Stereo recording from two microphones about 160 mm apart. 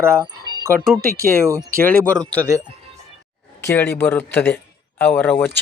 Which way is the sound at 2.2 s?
25° right (ahead or behind).